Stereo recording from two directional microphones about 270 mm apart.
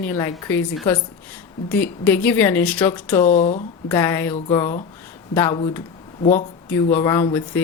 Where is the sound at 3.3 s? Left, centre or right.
Left.